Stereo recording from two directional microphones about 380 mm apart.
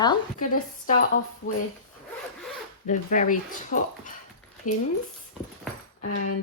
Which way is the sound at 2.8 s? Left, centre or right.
Centre.